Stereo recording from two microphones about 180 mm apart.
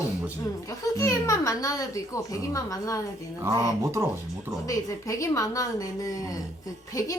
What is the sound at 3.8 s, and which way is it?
Speech, 15° right (ahead or behind).